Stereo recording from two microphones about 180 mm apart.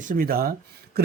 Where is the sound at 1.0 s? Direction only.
60° right (ahead or behind).